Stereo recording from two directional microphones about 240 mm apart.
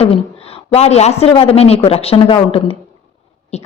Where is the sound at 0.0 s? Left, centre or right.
Left.